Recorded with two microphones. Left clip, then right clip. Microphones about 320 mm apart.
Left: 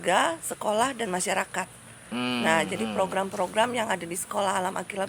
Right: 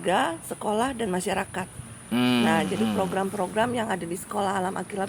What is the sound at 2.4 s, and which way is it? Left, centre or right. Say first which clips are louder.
Speech: even; left.